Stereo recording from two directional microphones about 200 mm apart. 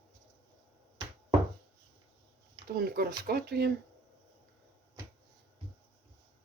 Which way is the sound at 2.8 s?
50° right (ahead or behind).